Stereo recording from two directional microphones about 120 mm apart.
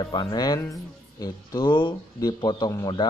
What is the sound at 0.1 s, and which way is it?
Speech, 40° left (ahead or behind).